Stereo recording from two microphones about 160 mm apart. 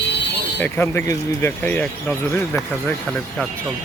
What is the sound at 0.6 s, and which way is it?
Speech, 15° left (ahead or behind).